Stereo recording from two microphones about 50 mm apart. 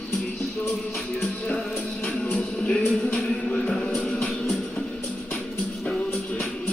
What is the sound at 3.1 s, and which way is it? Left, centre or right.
Music, centre.